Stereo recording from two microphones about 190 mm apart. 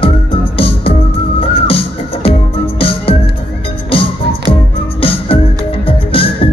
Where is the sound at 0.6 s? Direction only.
30° left (ahead or behind).